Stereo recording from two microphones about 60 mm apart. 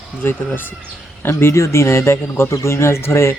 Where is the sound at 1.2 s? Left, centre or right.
Left.